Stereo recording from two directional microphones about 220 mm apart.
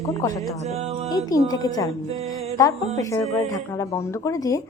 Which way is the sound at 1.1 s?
15° left (ahead or behind).